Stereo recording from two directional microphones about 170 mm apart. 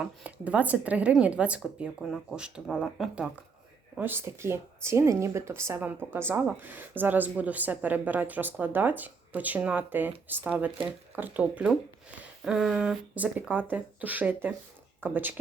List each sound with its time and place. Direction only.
0.0 s speech: 5° right (ahead or behind)